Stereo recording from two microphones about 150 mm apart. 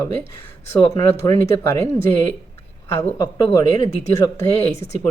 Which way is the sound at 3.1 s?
25° left (ahead or behind).